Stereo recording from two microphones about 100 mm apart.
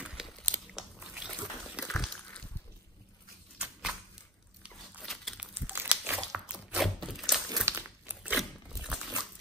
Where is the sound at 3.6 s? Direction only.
5° right (ahead or behind).